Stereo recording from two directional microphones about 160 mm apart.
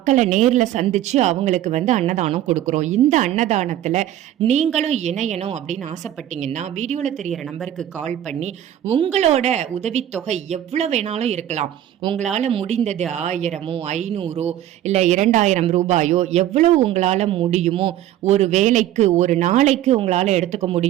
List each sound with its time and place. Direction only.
0.0 s a man's voice: 50° right (ahead or behind)
7.3 s a woman's voice: centre (ahead or behind)
7.9 s a man's voice: 45° right (ahead or behind)